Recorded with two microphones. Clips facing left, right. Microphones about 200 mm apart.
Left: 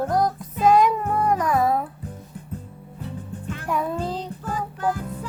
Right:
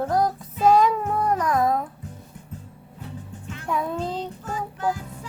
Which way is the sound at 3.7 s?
Centre (ahead or behind).